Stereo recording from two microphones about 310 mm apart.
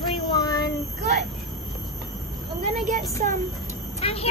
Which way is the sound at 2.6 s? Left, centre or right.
Right.